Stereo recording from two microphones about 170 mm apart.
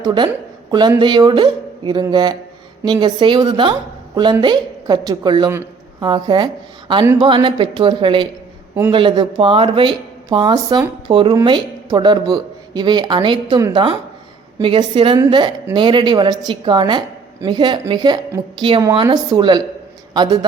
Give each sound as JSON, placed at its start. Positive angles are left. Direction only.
{"t": 0.0, "sound": "a woman's voice", "side_deg": -25}
{"t": 5.5, "sound": "a sound", "side_deg": -15}
{"t": 6.1, "sound": "a woman's voice", "side_deg": -25}